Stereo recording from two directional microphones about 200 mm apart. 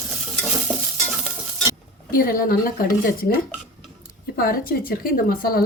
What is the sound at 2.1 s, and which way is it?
Speech, 45° left (ahead or behind).